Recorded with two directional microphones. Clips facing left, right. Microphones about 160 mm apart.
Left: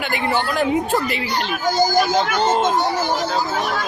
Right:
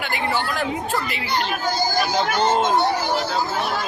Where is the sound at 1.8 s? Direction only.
45° left (ahead or behind).